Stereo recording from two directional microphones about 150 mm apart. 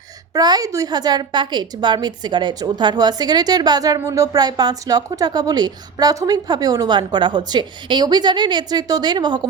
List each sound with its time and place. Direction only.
0.3 s a woman's voice: 25° right (ahead or behind)